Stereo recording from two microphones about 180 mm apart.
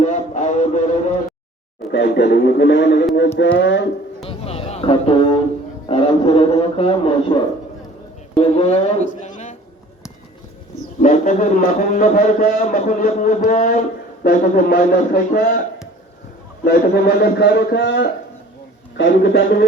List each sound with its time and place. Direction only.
0.0 s music: 40° left (ahead or behind)
1.9 s speech: 75° left (ahead or behind)
3.3 s a sound: 85° left
4.2 s music: 35° left (ahead or behind)
5.9 s a man's voice: 30° left (ahead or behind)
8.4 s a man's voice: 35° left (ahead or behind)
9.2 s a sound: 40° left (ahead or behind)
11.0 s a man's voice: 40° left (ahead or behind)
16.6 s a man's voice: 65° left (ahead or behind)